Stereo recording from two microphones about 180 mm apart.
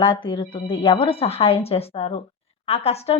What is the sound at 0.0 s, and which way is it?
A woman's voice, 30° left (ahead or behind).